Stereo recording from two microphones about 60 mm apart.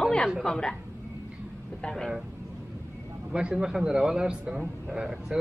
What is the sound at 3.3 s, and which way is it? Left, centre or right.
A man's voice, centre.